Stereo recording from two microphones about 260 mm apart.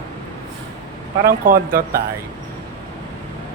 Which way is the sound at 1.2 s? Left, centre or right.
Right.